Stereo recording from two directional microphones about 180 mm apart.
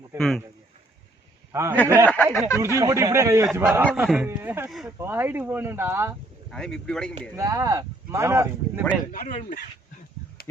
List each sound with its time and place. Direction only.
0.2 s speech: centre (ahead or behind)
1.7 s speech: 10° left (ahead or behind)
2.6 s speech: 15° right (ahead or behind)
6.5 s speech: 5° left (ahead or behind)
7.3 s speech: 15° right (ahead or behind)
9.1 s speech: 45° left (ahead or behind)